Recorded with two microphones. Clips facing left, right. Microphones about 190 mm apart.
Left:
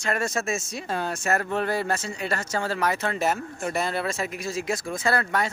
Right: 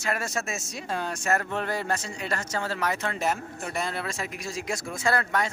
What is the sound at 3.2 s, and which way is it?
Speech, 5° left (ahead or behind).